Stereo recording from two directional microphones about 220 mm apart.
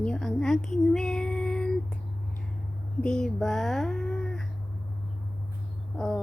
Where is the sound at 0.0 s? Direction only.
5° left (ahead or behind).